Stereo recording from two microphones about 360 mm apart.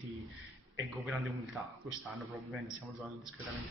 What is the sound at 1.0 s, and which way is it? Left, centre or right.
A man's voice, centre.